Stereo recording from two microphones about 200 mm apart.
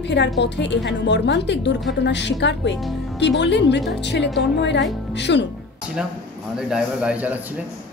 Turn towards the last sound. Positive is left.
turn(degrees=-5)  # may be behind; listen again after turning